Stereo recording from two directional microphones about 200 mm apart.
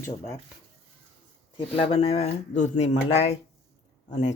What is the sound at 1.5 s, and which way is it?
Speech, 30° left (ahead or behind).